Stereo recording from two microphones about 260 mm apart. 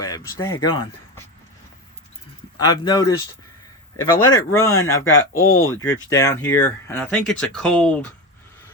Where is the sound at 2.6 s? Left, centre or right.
Centre.